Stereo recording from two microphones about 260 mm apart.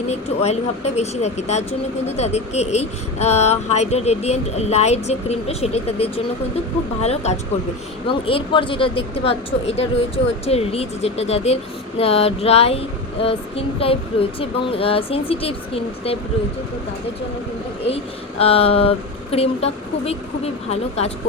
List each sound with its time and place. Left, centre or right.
0.1 s speech: left
17.8 s speech: left